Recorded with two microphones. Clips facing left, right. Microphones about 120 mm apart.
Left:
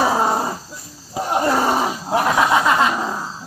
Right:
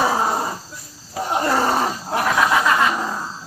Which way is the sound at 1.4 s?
10° left (ahead or behind).